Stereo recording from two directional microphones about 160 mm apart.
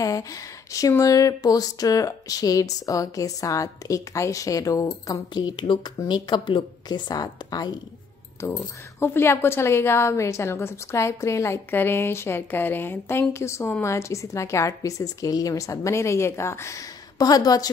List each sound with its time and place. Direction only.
0.0 s a woman's voice: 20° left (ahead or behind)